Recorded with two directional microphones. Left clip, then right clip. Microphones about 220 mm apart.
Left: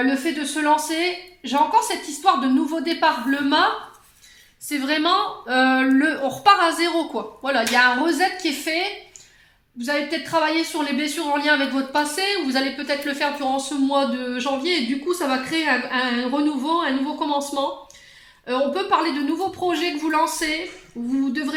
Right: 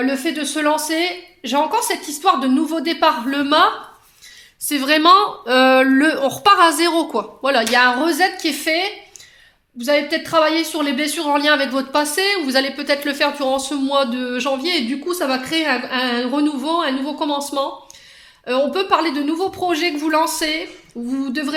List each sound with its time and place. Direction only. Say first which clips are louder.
0.3 s a woman's voice: even; 45° right (ahead or behind)
4.7 s a woman's voice: right 8 dB; 50° right (ahead or behind)
18.4 s a woman's voice: right 4 dB; 40° right (ahead or behind)